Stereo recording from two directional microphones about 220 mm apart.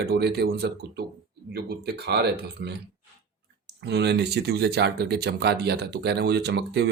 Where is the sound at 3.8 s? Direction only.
50° right (ahead or behind).